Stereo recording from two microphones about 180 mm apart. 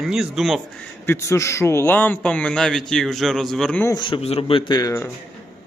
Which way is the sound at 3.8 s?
25° left (ahead or behind).